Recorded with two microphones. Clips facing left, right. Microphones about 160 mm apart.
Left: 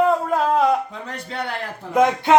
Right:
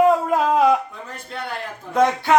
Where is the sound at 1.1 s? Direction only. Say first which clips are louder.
Left 2 dB; 80° left.